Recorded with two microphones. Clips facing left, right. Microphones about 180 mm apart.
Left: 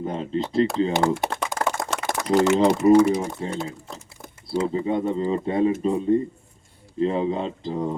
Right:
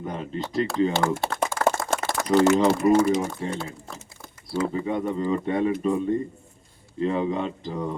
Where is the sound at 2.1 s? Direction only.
20° left (ahead or behind).